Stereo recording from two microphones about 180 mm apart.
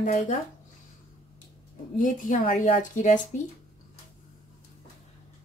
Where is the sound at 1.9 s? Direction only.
50° left (ahead or behind).